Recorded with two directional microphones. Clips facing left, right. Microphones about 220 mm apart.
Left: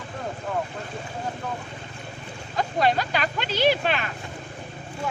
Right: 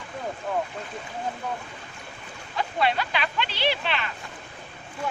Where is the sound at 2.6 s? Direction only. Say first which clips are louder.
Left 3 dB; 40° left (ahead or behind).